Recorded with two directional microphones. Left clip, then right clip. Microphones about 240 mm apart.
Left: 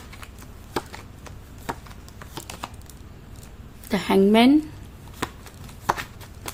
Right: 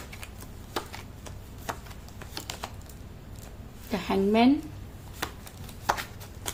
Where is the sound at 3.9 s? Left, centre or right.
Left.